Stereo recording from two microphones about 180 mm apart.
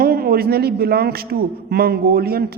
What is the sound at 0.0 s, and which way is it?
A man's voice, 55° right (ahead or behind).